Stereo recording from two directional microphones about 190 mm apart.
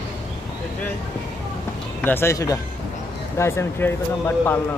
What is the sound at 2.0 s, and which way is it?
Speech, 10° left (ahead or behind).